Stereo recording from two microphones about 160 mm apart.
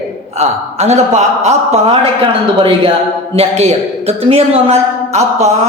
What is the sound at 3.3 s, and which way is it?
Speech, 40° right (ahead or behind).